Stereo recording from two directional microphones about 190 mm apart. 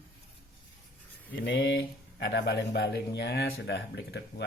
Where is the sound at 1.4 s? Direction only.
60° left (ahead or behind).